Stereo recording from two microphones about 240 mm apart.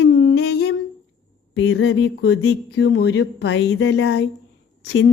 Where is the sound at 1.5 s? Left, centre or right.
Left.